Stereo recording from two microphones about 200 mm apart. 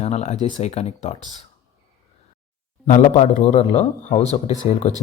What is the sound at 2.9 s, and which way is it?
Speech, 35° left (ahead or behind).